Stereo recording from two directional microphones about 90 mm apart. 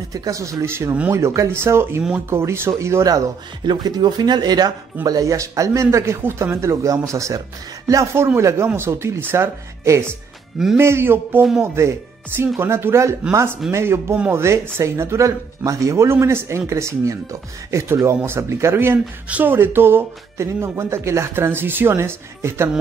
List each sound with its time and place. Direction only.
0.1 s a man's voice: 40° right (ahead or behind)
3.6 s a man's voice: 55° right (ahead or behind); by 22.7 s 30° right (ahead or behind)